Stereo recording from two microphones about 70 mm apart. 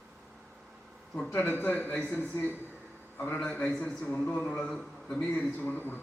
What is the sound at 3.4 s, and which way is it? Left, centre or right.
A man's voice, centre.